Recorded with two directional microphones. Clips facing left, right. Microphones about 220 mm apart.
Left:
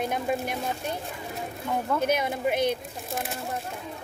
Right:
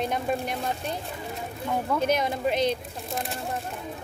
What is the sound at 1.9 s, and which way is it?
Speech, 5° left (ahead or behind).